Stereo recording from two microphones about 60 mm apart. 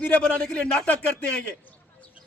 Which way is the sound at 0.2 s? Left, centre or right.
Left.